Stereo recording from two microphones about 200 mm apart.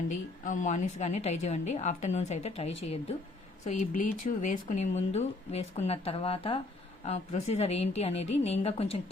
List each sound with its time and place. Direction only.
0.4 s speech: 40° left (ahead or behind)